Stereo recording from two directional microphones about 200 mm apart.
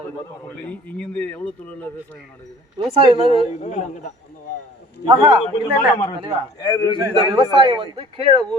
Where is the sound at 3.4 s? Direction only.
35° left (ahead or behind).